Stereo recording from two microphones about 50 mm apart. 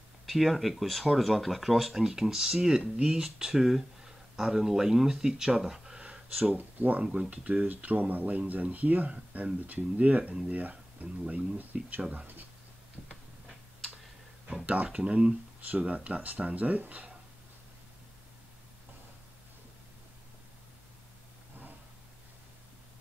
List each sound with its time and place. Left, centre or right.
0.3 s speech: centre; by 3.3 s right
3.3 s speech: centre
6.5 s speech: right
7.2 s speech: right
15.0 s speech: right